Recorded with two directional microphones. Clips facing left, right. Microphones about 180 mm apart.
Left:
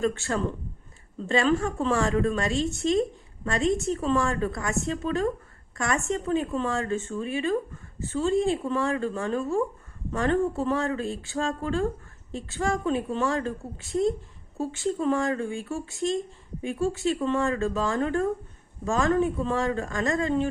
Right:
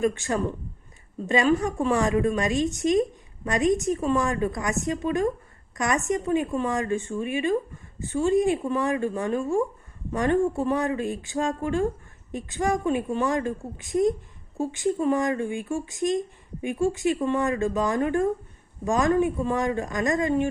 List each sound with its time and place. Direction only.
0.0 s a woman's voice: 15° right (ahead or behind)